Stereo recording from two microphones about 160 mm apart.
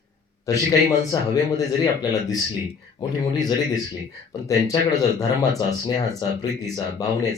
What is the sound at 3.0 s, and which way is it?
Speech, 25° left (ahead or behind).